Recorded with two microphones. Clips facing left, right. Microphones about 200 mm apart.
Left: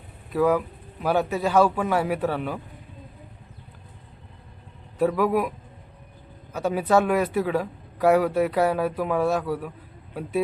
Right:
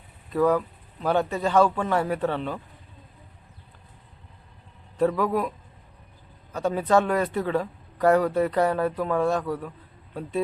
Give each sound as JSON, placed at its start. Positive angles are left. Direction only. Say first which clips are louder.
{"t": 0.3, "sound": "a man's voice", "louder": "even", "side_deg": 5}
{"t": 4.9, "sound": "a man's voice", "louder": "left 1 dB", "side_deg": 10}